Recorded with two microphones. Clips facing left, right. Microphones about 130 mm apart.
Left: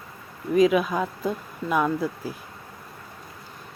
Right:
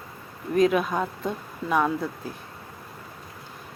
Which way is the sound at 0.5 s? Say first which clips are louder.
Left 2 dB; centre (ahead or behind).